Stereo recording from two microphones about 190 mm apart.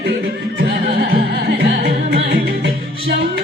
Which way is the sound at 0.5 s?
55° right (ahead or behind).